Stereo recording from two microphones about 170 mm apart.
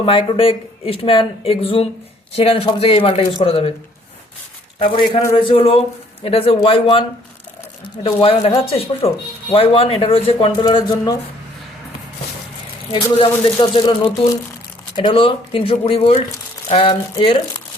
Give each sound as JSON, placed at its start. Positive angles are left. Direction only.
{"t": 0.0, "sound": "speech", "side_deg": 30}
{"t": 4.8, "sound": "speech", "side_deg": 30}
{"t": 8.0, "sound": "speech", "side_deg": 35}
{"t": 12.9, "sound": "speech", "side_deg": 30}